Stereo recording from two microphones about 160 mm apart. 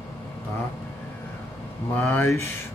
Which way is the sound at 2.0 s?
15° left (ahead or behind).